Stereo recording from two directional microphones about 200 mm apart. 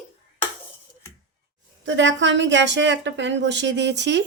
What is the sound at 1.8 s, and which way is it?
A woman's voice, 65° right (ahead or behind).